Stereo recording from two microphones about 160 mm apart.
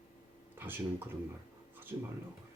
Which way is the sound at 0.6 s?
15° right (ahead or behind).